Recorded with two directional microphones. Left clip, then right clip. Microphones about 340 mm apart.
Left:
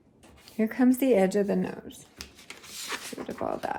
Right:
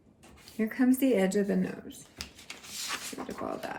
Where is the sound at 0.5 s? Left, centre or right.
Left.